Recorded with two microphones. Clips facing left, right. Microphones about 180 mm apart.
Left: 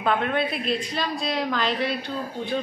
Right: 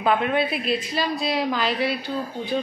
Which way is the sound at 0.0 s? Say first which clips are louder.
Right 2 dB; 5° right (ahead or behind).